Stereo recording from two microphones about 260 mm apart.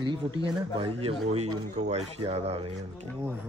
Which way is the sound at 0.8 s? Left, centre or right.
Right.